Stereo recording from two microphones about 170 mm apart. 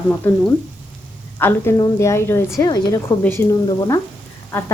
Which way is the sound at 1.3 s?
15° left (ahead or behind).